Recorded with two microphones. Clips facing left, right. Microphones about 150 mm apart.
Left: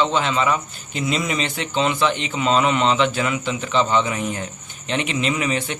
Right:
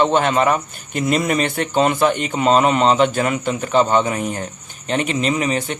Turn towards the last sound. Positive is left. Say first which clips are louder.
# right 3 dB
turn(degrees=-40)  # may be behind; listen again after turning